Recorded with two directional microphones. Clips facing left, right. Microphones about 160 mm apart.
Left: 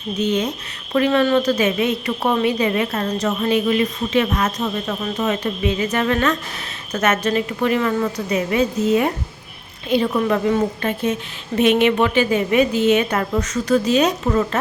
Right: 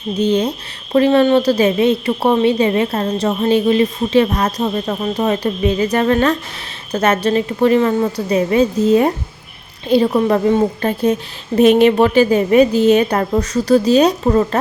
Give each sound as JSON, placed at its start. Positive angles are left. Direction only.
{"t": 0.2, "sound": "a woman's voice", "side_deg": -30}